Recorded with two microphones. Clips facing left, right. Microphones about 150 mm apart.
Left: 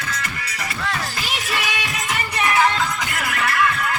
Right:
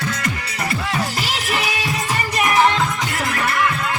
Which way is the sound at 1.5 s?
20° right (ahead or behind).